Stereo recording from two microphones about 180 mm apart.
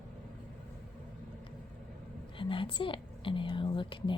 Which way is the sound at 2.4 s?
30° left (ahead or behind).